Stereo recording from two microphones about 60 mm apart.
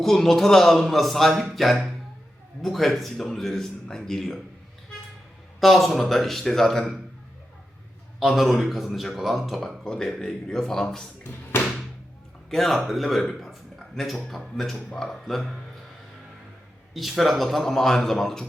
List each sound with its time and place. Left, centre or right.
0.0 s speech: centre
5.5 s speech: centre
8.2 s speech: centre
11.3 s music: left
12.5 s speech: centre
16.9 s speech: centre